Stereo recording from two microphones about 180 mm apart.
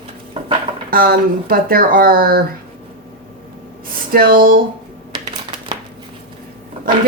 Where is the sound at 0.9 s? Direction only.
55° right (ahead or behind).